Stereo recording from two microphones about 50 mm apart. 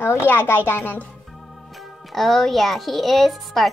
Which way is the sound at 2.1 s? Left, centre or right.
Centre.